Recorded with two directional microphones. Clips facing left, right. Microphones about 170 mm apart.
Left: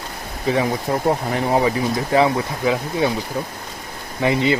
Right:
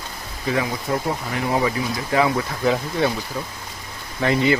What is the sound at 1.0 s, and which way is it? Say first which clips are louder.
Speech: left 5 dB; 40° left (ahead or behind).